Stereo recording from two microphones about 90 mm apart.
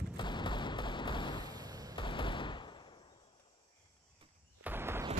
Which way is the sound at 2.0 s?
65° left (ahead or behind).